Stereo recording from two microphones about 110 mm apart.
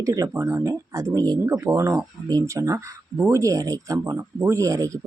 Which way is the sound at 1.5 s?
25° right (ahead or behind).